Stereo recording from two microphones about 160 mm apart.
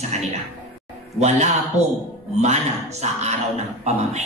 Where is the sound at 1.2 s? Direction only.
45° right (ahead or behind).